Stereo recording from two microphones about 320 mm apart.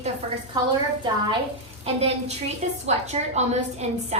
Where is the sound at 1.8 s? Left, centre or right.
Centre.